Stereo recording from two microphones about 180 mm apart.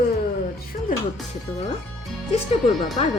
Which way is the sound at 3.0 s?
35° left (ahead or behind).